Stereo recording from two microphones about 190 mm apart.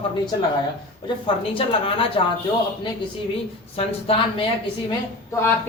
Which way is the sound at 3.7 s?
30° left (ahead or behind).